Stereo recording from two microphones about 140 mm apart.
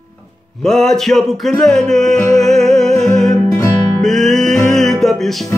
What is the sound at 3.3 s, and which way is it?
Music, 20° left (ahead or behind).